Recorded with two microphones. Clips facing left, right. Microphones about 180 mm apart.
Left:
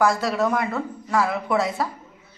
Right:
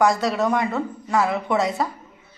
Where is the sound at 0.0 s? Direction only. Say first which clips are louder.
Right 1 dB; centre (ahead or behind).